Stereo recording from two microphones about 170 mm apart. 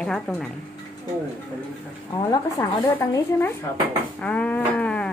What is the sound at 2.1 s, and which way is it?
Speech, 20° left (ahead or behind).